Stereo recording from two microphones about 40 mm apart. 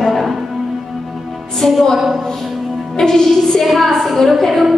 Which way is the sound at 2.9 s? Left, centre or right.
Centre.